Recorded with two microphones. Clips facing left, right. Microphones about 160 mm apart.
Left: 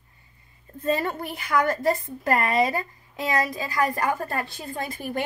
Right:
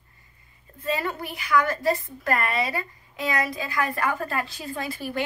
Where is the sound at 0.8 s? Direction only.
45° left (ahead or behind).